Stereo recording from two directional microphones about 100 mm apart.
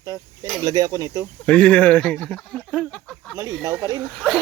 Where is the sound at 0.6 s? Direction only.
40° right (ahead or behind).